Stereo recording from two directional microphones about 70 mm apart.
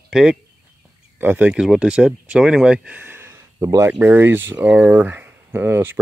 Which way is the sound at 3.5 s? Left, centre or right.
Right.